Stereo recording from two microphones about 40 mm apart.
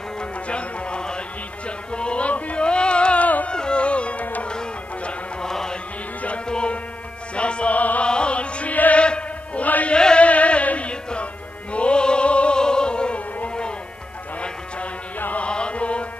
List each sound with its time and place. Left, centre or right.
0.2 s music: left
3.2 s music: left
3.4 s music: left
4.5 s music: left
6.2 s music: left
7.7 s music: left
8.0 s music: left
9.8 s chant: left
10.2 s music: left
15.1 s music: left
15.4 s music: left